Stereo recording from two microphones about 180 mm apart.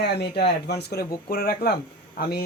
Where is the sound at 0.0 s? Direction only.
65° left (ahead or behind).